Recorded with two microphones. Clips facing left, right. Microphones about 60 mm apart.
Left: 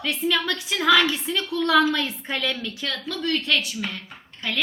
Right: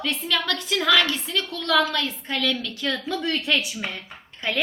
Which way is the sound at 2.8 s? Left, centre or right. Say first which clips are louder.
Right 2 dB; centre.